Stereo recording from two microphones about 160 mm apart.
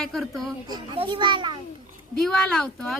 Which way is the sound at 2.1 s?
5° left (ahead or behind).